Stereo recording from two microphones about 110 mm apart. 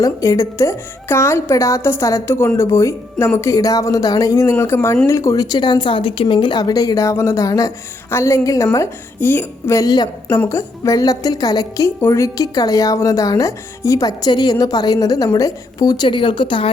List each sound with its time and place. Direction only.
0.0 s a woman's voice: 30° left (ahead or behind)
9.7 s speech: 35° left (ahead or behind)